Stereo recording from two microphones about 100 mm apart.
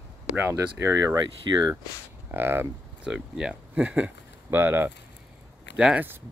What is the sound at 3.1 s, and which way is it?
Speech, 5° right (ahead or behind).